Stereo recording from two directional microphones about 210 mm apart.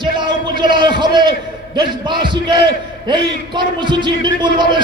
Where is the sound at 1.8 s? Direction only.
20° right (ahead or behind).